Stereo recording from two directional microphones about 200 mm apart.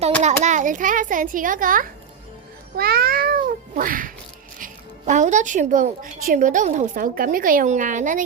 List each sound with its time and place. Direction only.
0.2 s a child's voice: 35° right (ahead or behind)